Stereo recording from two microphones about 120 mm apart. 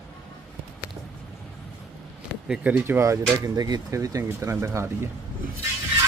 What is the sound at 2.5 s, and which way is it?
Speech, 10° right (ahead or behind).